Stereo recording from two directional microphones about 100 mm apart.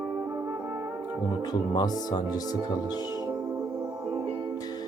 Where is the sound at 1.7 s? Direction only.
40° left (ahead or behind).